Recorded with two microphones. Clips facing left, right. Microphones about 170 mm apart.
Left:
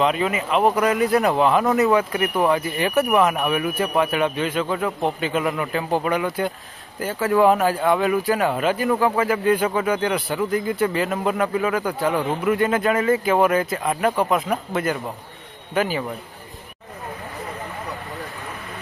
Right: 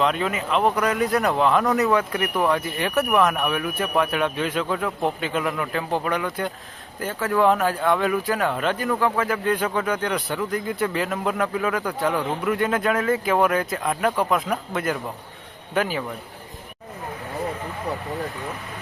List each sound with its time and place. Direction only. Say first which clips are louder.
0.0 s speech: left 2 dB; 5° left (ahead or behind)